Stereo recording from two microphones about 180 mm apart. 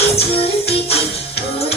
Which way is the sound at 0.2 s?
35° left (ahead or behind).